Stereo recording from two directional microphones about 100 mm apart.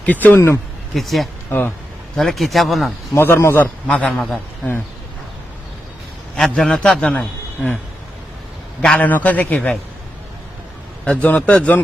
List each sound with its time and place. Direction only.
0.0 s speech: 15° left (ahead or behind)
0.9 s a man's voice: centre (ahead or behind)
1.5 s speech: 15° left (ahead or behind)
2.1 s a man's voice: centre (ahead or behind)
3.2 s a man's voice: 25° left (ahead or behind)
3.8 s speech: 10° left (ahead or behind)
6.3 s a man's voice: 5° left (ahead or behind)
9.0 s speech: 15° left (ahead or behind)
11.0 s speech: 15° left (ahead or behind)